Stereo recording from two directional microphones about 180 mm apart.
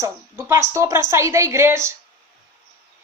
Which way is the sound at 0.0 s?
15° right (ahead or behind).